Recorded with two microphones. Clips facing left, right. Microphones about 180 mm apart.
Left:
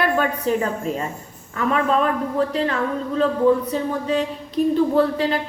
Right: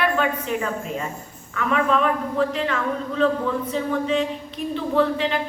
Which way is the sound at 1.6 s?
35° left (ahead or behind).